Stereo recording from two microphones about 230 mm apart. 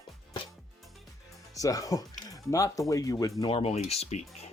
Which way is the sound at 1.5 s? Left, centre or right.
Centre.